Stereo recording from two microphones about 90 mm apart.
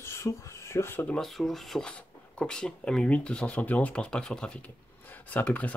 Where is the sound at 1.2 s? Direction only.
Centre (ahead or behind).